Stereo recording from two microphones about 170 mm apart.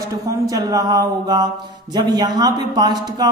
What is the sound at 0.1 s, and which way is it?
A man's voice, 20° right (ahead or behind).